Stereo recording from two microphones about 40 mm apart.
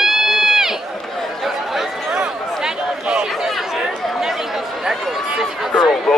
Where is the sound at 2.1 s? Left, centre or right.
Centre.